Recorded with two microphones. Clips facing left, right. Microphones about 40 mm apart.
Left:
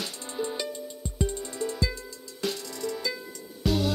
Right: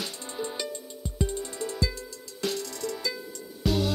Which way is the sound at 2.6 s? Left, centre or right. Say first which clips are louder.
Left 1 dB; centre.